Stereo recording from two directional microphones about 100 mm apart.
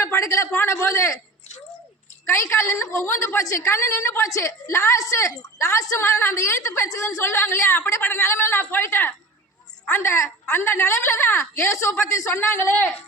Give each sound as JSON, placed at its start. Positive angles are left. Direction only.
{"t": 0.0, "sound": "a woman's voice", "side_deg": 30}
{"t": 2.3, "sound": "a woman's voice", "side_deg": 30}